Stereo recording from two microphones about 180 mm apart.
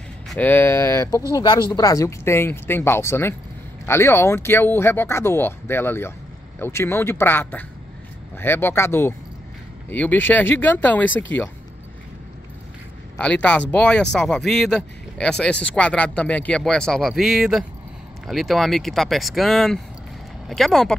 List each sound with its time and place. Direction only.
0.3 s speech: 10° left (ahead or behind)
1.3 s speech: 25° left (ahead or behind); by 11.1 s 10° left (ahead or behind)
13.2 s speech: 5° left (ahead or behind)